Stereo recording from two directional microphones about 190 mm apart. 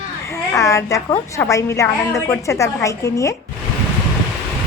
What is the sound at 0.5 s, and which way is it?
A woman's voice, 15° left (ahead or behind).